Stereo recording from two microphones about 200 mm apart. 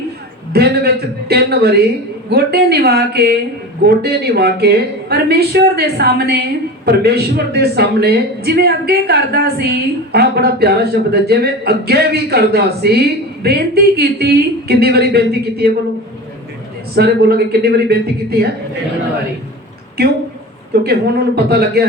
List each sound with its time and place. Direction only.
0.5 s a woman's voice: 55° right (ahead or behind)
16.9 s a woman's voice: 55° right (ahead or behind)
20.7 s a woman's voice: 55° right (ahead or behind)